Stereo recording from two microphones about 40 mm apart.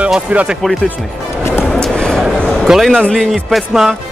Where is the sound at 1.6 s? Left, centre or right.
Centre.